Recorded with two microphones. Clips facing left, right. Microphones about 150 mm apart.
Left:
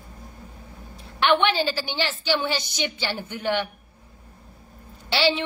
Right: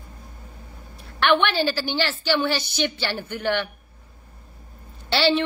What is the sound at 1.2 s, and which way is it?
A woman's voice, 20° left (ahead or behind).